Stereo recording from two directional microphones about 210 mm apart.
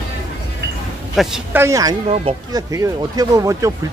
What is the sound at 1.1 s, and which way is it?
Speech, centre (ahead or behind).